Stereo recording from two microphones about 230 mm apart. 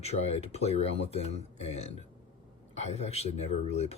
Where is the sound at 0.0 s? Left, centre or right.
Left.